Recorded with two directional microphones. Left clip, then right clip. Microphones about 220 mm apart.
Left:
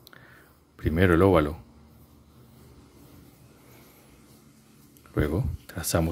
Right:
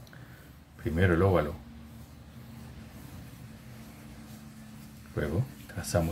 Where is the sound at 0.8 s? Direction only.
50° left (ahead or behind).